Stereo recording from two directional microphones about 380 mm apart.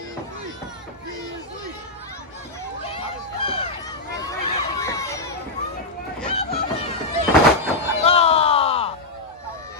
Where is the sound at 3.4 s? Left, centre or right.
Centre.